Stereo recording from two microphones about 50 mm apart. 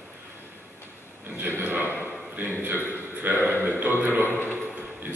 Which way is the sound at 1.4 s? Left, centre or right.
Right.